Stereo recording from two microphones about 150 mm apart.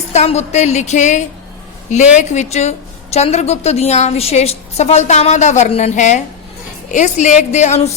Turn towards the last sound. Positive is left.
turn(degrees=50)  # may be behind; listen again after turning